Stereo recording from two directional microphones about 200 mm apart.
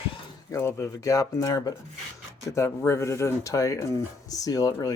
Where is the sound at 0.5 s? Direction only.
15° left (ahead or behind).